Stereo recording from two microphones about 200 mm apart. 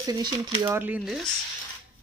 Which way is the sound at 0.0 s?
20° right (ahead or behind).